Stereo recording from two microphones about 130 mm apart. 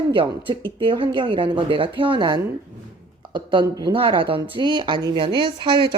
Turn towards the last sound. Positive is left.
turn(degrees=-40)  # may be behind; listen again after turning